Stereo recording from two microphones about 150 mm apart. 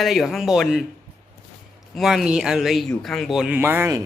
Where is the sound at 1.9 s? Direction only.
Centre (ahead or behind).